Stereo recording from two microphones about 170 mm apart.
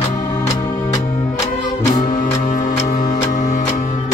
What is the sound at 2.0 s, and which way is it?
Music, 50° left (ahead or behind).